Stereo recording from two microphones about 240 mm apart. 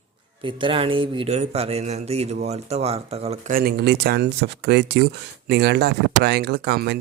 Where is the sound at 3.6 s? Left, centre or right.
Right.